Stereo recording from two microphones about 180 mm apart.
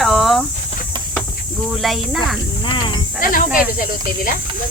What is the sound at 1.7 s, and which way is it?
Speech, centre (ahead or behind).